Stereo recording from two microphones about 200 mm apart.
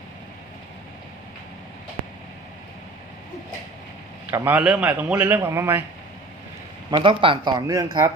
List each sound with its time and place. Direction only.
4.3 s a man's voice: 10° right (ahead or behind)
6.9 s a man's voice: 25° right (ahead or behind)